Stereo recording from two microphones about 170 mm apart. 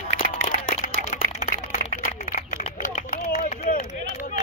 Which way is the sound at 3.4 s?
45° left (ahead or behind).